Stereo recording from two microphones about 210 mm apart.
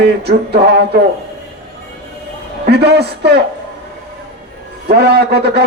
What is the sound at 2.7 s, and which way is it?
Speech, 50° right (ahead or behind).